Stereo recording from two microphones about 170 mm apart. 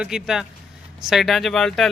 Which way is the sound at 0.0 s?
5° right (ahead or behind).